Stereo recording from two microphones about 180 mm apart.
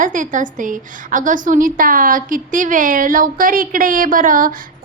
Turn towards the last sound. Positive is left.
turn(degrees=-50)  # may be behind; listen again after turning